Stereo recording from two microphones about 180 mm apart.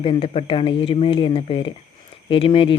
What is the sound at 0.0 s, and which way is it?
Speech, 30° left (ahead or behind).